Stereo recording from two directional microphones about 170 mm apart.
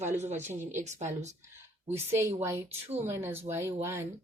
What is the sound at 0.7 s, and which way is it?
Speech, 45° right (ahead or behind).